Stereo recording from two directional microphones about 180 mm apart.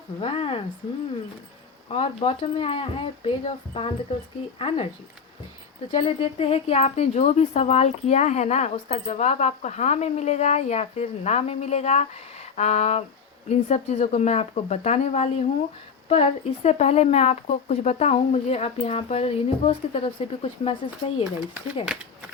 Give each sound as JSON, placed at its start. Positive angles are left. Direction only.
{"t": 0.2, "sound": "speech", "side_deg": 30}
{"t": 1.9, "sound": "speech", "side_deg": 35}
{"t": 5.9, "sound": "speech", "side_deg": 30}